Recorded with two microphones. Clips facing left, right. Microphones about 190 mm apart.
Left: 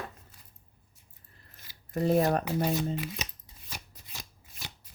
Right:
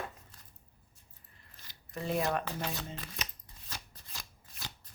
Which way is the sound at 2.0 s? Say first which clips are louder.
Left 7 dB; 45° left (ahead or behind).